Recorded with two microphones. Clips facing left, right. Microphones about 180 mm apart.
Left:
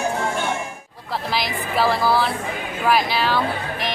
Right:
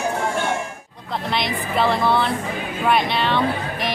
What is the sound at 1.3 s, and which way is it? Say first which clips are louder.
A woman's voice: right 2 dB; centre (ahead or behind).